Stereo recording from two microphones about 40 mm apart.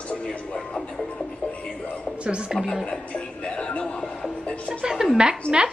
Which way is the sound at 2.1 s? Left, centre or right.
Right.